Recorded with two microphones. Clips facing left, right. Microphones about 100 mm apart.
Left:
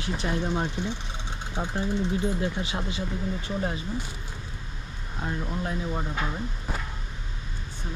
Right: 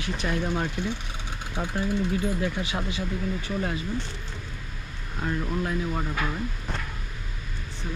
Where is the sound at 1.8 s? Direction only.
25° left (ahead or behind).